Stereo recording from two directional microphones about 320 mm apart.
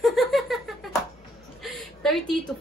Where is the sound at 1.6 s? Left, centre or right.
Centre.